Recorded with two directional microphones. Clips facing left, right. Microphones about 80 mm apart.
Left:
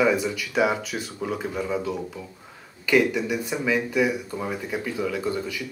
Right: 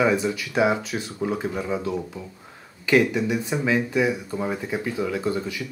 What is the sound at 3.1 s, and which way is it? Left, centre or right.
Speech, right.